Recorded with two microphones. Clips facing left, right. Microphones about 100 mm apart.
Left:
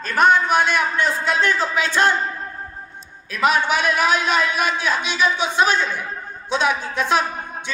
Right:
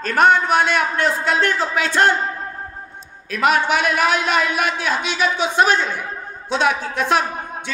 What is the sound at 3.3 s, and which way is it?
A woman's voice, 60° right (ahead or behind).